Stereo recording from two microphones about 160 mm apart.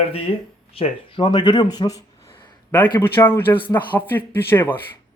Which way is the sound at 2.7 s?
10° left (ahead or behind).